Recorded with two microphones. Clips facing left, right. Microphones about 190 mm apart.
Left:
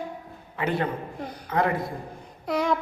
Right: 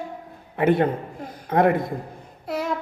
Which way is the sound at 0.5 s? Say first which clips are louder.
Right 7 dB; 55° right (ahead or behind).